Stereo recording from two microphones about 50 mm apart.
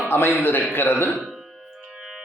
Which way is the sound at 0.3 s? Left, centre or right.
Left.